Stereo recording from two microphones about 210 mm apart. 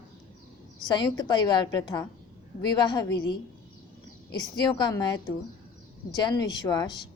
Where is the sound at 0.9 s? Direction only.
20° left (ahead or behind).